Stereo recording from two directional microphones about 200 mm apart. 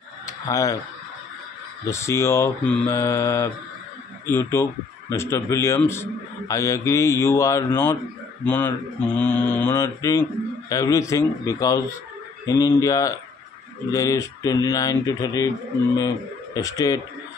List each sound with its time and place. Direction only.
0.3 s speech: 15° left (ahead or behind)
1.9 s a man's voice: 15° left (ahead or behind)
16.5 s a man's voice: 20° left (ahead or behind)